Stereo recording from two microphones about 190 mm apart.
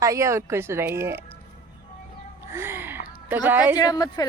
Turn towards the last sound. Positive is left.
turn(degrees=20)  # may be behind; listen again after turning